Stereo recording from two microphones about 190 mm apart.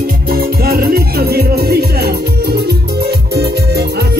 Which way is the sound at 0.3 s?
55° right (ahead or behind).